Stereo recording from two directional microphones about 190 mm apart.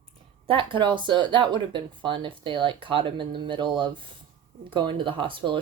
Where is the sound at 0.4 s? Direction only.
25° right (ahead or behind).